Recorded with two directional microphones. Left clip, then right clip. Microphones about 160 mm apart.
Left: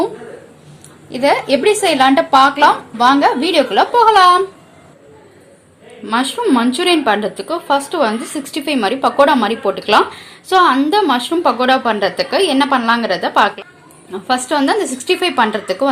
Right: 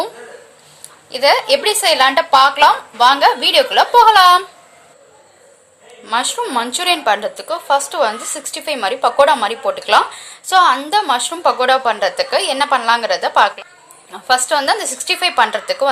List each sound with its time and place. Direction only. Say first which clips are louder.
1.1 s a woman's voice: right 1 dB; 5° right (ahead or behind)
6.1 s a woman's voice: left 3 dB; centre (ahead or behind)